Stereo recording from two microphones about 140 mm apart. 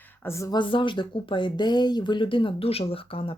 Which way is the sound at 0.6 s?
35° left (ahead or behind).